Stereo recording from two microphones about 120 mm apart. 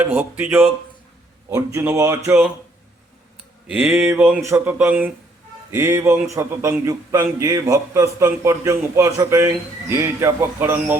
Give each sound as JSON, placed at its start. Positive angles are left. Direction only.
{"t": 0.0, "sound": "a man's voice", "side_deg": -15}
{"t": 3.7, "sound": "a man's voice", "side_deg": -5}